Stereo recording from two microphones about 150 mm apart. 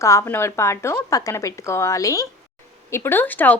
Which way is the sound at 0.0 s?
20° left (ahead or behind).